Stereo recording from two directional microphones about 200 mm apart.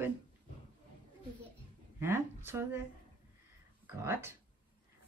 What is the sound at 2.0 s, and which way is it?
Speech, 10° right (ahead or behind).